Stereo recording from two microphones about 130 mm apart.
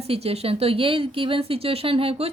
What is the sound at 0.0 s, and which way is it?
A woman's voice, 50° right (ahead or behind).